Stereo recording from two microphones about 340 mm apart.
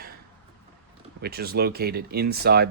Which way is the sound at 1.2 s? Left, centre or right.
Right.